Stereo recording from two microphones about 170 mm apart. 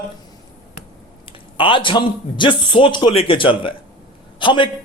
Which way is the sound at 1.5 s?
30° left (ahead or behind).